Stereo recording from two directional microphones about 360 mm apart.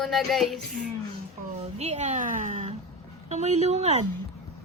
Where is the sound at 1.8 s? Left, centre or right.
Centre.